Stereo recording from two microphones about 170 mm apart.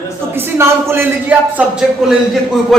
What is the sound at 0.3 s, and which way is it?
A man's voice, 15° right (ahead or behind).